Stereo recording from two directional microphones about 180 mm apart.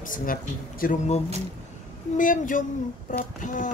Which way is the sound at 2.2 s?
50° left (ahead or behind).